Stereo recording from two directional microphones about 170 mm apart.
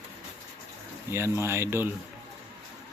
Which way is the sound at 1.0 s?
15° right (ahead or behind).